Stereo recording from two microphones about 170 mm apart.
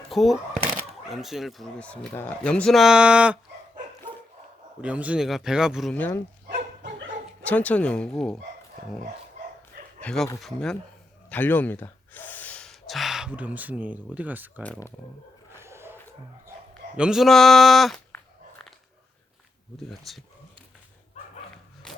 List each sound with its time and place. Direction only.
0.1 s speech: centre (ahead or behind)
4.8 s speech: 10° right (ahead or behind)
5.9 s speech: 10° left (ahead or behind)
6.8 s dog: 90° right
7.4 s speech: 10° left (ahead or behind)
10.0 s speech: 5° left (ahead or behind)
14.6 s speech: 10° left (ahead or behind)
15.5 s snort: 15° right (ahead or behind)
17.0 s speech: centre (ahead or behind)
19.9 s speech: centre (ahead or behind)
21.9 s a sound: 5° left (ahead or behind)